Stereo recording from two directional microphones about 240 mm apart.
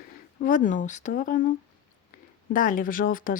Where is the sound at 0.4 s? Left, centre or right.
Left.